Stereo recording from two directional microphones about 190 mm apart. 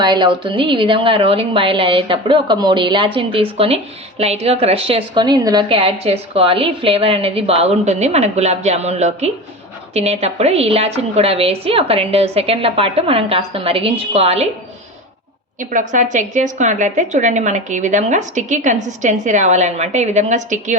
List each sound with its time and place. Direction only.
0.0 s a woman's voice: 25° right (ahead or behind)
15.7 s a woman's voice: 40° right (ahead or behind)